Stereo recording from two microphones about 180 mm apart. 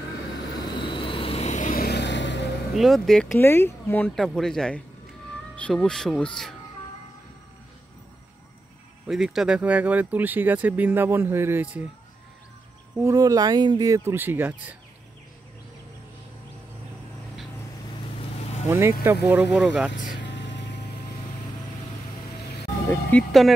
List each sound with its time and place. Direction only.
0.7 s vehicle: 25° left (ahead or behind); by 1.9 s 45° left (ahead or behind)
1.9 s vehicle: 75° left (ahead or behind)
2.7 s speech: centre (ahead or behind)
9.0 s speech: 5° right (ahead or behind)
12.9 s speech: 15° right (ahead or behind)
18.7 s speech: 15° right (ahead or behind)
19.2 s speech: 5° right (ahead or behind)
20.2 s music: 75° left (ahead or behind)
22.8 s speech: 5° left (ahead or behind)